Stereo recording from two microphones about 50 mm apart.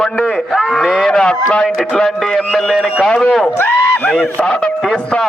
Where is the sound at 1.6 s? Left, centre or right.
Centre.